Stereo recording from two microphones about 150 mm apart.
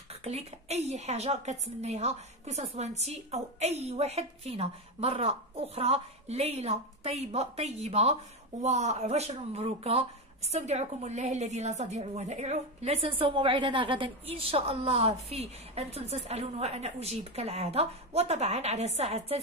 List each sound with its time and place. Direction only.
0.2 s a woman's voice: 45° right (ahead or behind)